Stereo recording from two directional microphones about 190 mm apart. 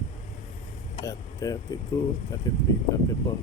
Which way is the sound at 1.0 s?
20° left (ahead or behind).